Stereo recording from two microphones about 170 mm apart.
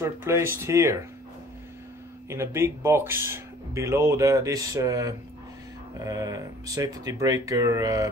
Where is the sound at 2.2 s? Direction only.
15° right (ahead or behind).